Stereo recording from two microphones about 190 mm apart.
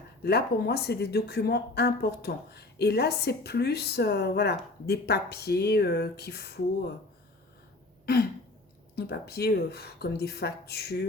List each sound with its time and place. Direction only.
0.2 s speech: 55° left (ahead or behind)
8.0 s throat clearing: 55° left (ahead or behind)
9.0 s speech: 60° left (ahead or behind)